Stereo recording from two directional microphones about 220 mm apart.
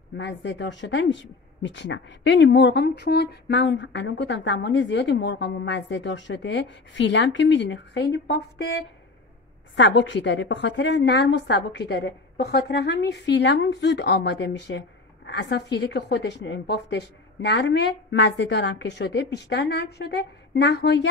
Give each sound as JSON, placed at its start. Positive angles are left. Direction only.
{"t": 0.2, "sound": "a woman's voice", "side_deg": 55}